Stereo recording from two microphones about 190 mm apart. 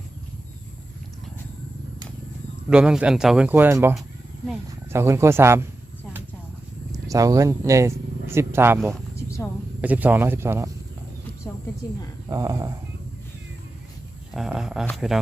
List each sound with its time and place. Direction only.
2.6 s speech: 5° right (ahead or behind)
6.9 s speech: 20° right (ahead or behind)
12.3 s speech: 15° right (ahead or behind)
14.3 s speech: centre (ahead or behind)